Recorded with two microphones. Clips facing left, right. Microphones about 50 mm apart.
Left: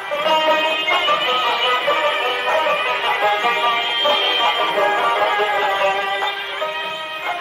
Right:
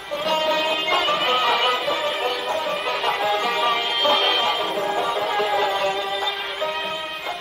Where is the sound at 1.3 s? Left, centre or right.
Centre.